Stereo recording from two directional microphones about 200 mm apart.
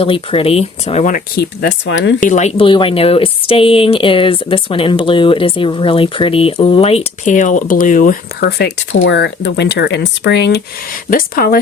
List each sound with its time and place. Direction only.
0.0 s speech: 25° left (ahead or behind)
1.4 s speech: 60° left (ahead or behind)
2.2 s speech: 35° left (ahead or behind); by 8.7 s 55° left (ahead or behind)
8.9 s speech: 70° left (ahead or behind)
11.1 s speech: 45° left (ahead or behind)